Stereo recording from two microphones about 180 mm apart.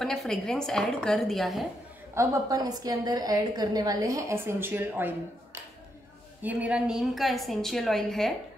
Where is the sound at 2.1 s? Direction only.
15° right (ahead or behind); by 8.3 s centre (ahead or behind).